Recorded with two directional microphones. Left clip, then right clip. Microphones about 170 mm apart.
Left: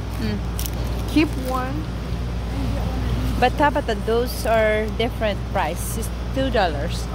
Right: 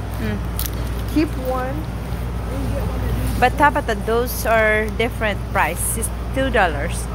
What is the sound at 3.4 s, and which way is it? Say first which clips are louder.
Speech: right 3 dB; 20° left (ahead or behind).